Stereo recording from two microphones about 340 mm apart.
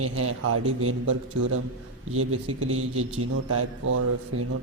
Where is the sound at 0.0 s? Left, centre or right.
Right.